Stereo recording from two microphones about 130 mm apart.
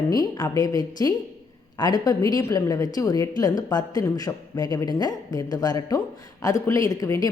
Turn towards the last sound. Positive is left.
turn(degrees=25)  # may be behind; listen again after turning